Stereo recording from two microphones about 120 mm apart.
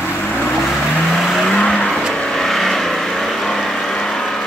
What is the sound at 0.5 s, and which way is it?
Vehicle, centre (ahead or behind).